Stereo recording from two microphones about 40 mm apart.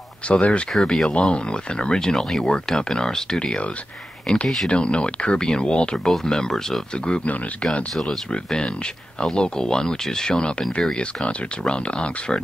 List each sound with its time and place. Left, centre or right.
0.3 s speech: left
0.7 s speech: centre
1.1 s speech: left
4.3 s speech: centre
4.6 s speech: left
7.9 s speech: centre
8.3 s speech: left